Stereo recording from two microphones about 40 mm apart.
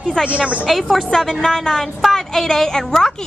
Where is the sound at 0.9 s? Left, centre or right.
Centre.